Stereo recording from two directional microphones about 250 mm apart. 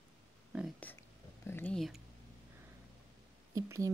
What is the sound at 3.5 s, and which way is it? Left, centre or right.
Speech, centre.